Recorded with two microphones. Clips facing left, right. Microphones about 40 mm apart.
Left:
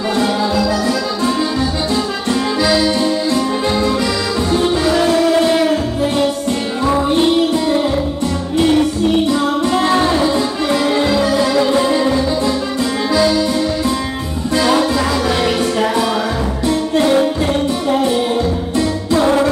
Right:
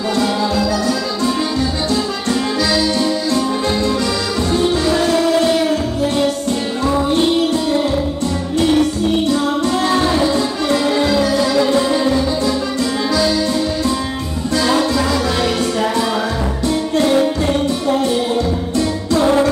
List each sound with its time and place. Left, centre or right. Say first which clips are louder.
0.1 s music: left 1 dB; centre
2.6 s accordion: left 3 dB; left
4.6 s music: left 1 dB; left
9.3 s music: left 1 dB; left
14.5 s music: left 2 dB; centre
17.5 s music: even; centre
18.8 s music: left 1 dB; left